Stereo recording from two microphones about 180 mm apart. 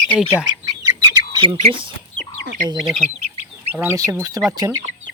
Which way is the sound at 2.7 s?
Centre (ahead or behind).